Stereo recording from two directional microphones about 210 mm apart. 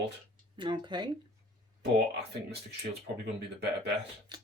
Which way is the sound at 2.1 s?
50° right (ahead or behind).